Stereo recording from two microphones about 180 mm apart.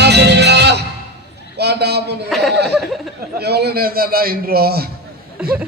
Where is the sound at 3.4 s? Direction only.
65° right (ahead or behind).